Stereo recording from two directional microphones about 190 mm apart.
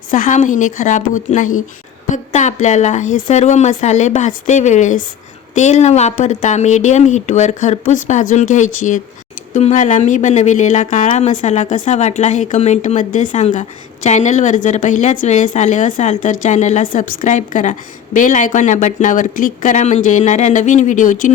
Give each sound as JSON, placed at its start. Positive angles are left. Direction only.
{"t": 0.1, "sound": "a woman's voice", "side_deg": 40}